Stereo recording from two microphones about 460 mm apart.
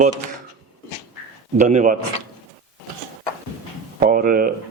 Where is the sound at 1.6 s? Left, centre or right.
Centre.